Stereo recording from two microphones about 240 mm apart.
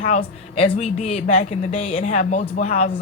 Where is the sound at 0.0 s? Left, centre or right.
Left.